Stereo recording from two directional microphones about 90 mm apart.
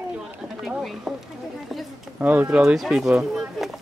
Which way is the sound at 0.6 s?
Centre (ahead or behind).